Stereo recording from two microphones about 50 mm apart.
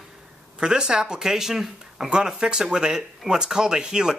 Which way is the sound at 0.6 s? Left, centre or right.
Centre.